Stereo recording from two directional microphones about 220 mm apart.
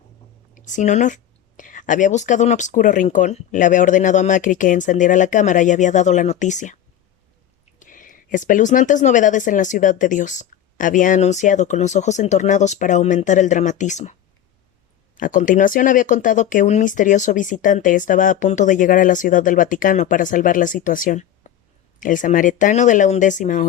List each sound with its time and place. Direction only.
0.5 s speech: 35° left (ahead or behind)
15.2 s speech: 35° left (ahead or behind)